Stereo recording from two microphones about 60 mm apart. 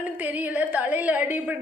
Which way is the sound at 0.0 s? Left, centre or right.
Right.